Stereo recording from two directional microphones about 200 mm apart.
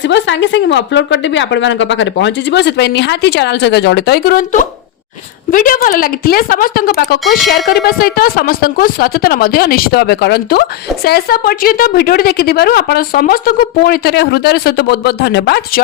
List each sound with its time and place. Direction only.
0.0 s a woman's voice: 65° left (ahead or behind)